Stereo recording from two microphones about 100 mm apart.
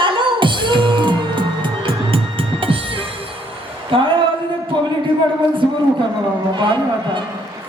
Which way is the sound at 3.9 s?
60° right (ahead or behind).